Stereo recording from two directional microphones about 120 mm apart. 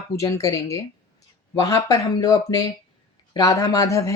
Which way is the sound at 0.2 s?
25° left (ahead or behind).